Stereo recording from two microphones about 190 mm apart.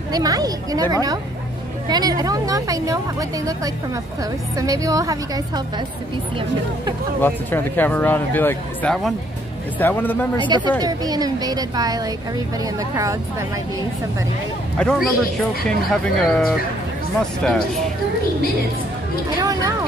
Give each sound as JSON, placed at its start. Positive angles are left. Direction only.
{"t": 0.1, "sound": "a woman's voice", "side_deg": -20}
{"t": 7.2, "sound": "speech", "side_deg": 10}
{"t": 10.4, "sound": "a woman's voice", "side_deg": -25}
{"t": 14.8, "sound": "speech", "side_deg": 5}
{"t": 19.4, "sound": "a sound", "side_deg": -20}